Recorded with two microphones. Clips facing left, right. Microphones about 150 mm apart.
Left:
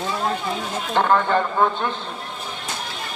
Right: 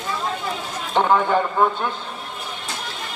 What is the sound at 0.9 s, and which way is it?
Speech, 15° right (ahead or behind).